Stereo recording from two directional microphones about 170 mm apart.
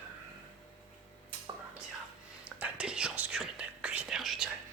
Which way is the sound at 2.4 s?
5° right (ahead or behind).